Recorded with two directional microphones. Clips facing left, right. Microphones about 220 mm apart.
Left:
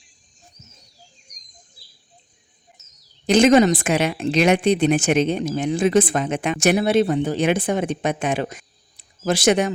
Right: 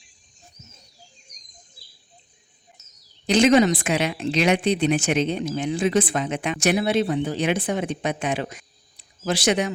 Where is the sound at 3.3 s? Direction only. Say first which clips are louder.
Left 3 dB; 45° left (ahead or behind).